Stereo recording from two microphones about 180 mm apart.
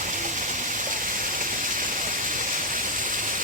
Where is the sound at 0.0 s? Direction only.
45° right (ahead or behind).